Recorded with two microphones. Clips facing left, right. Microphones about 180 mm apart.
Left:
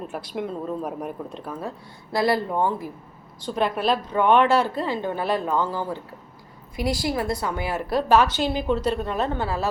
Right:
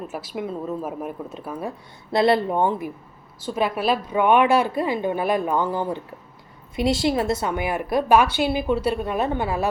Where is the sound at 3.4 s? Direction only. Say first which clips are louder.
Right 1 dB; 5° right (ahead or behind).